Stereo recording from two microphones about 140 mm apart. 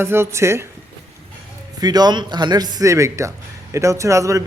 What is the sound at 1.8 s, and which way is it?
Speech, 30° right (ahead or behind).